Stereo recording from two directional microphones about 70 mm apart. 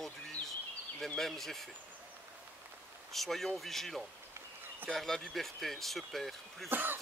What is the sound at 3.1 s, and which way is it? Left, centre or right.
Speech, centre.